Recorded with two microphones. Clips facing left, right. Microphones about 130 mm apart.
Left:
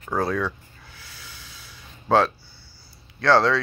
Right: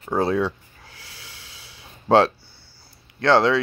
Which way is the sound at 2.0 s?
30° right (ahead or behind).